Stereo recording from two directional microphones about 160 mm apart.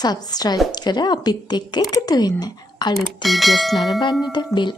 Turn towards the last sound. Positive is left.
turn(degrees=30)  # may be behind; listen again after turning